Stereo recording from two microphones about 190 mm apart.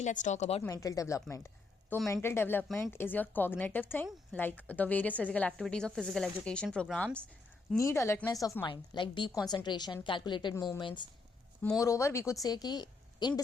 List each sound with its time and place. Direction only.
0.0 s a woman's voice: 40° left (ahead or behind)
0.6 s a woman's voice: 15° left (ahead or behind)
7.8 s a woman's voice: 15° left (ahead or behind)